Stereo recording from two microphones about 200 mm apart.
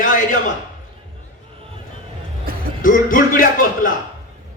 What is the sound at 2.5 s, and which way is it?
Music, 45° right (ahead or behind).